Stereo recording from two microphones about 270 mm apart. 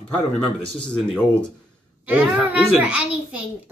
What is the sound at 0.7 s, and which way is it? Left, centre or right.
A child's voice, centre.